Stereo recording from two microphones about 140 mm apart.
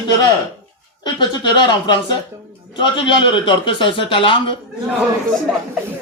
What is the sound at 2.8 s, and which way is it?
A man's voice, 35° left (ahead or behind).